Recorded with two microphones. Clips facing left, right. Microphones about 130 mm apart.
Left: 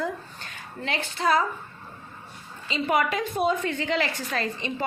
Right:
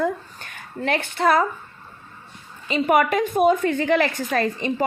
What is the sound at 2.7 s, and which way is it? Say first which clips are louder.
Speech: right 6 dB; 55° right (ahead or behind).